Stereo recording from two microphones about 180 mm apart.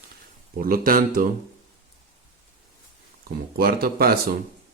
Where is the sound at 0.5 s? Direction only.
55° right (ahead or behind).